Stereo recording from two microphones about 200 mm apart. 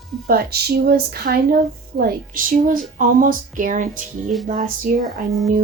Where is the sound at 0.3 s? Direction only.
50° right (ahead or behind).